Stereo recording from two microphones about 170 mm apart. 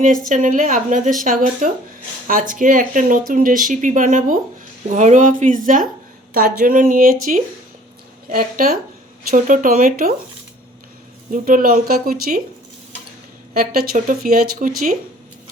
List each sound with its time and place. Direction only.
0.0 s speech: 50° right (ahead or behind)
11.3 s speech: 55° right (ahead or behind)
13.5 s speech: 60° right (ahead or behind)